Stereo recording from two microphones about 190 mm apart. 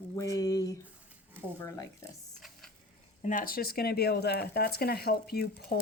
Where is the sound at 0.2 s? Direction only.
20° left (ahead or behind).